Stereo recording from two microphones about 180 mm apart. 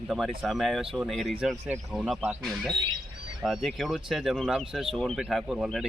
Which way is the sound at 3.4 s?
5° right (ahead or behind).